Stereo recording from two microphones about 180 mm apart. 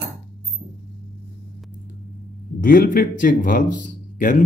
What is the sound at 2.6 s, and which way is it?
Speech, 50° left (ahead or behind).